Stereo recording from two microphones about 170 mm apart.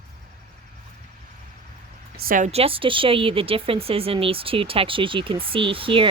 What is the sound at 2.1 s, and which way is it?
Speech, 55° right (ahead or behind).